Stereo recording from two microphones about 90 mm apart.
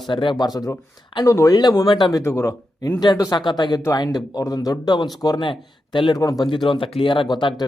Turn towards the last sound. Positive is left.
turn(degrees=60)  # may be behind; listen again after turning